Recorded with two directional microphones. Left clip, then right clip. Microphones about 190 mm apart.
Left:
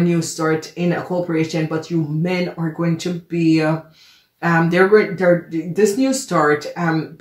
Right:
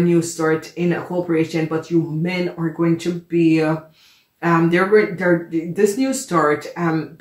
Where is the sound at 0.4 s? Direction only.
30° left (ahead or behind).